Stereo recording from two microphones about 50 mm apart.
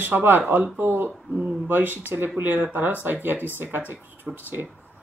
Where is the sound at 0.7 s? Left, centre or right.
Right.